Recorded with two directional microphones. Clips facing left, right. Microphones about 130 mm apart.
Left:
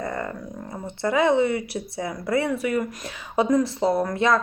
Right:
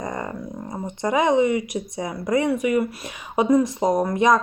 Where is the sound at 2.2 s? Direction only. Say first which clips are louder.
Right 3 dB; 20° right (ahead or behind).